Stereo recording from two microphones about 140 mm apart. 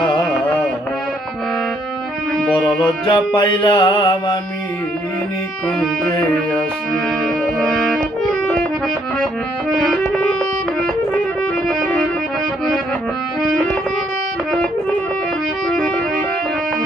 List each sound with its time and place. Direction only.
2.5 s music: 35° left (ahead or behind)
6.3 s music: 10° left (ahead or behind)
9.7 s music: 5° left (ahead or behind)
11.7 s music: 5° left (ahead or behind)